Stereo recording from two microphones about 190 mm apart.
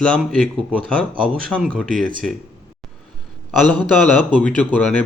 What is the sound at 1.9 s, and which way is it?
Speech, 45° right (ahead or behind).